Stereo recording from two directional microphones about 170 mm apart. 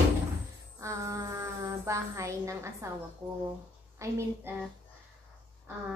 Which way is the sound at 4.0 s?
15° right (ahead or behind).